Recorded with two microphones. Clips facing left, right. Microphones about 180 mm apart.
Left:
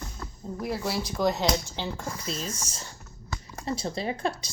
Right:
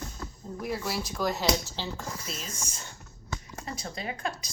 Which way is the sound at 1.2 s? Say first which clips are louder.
Left 3 dB; 20° left (ahead or behind).